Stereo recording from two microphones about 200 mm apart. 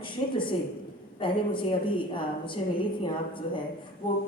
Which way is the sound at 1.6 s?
25° left (ahead or behind).